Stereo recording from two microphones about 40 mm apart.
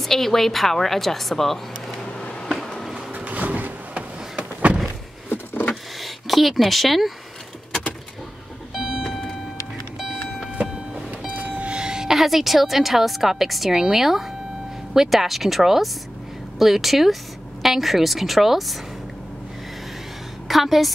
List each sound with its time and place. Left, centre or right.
0.0 s a woman's voice: centre
2.1 s a sound: left
2.6 s a sound: centre
3.3 s a sound: right
5.3 s vehicle: left
5.9 s a sound: centre
8.8 s music: centre
9.9 s vehicle: centre
11.1 s vehicle: right
11.7 s music: centre
12.2 s a woman's voice: centre
20.4 s a woman's voice: centre